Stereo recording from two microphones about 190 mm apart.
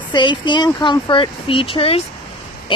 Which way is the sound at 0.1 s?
25° left (ahead or behind).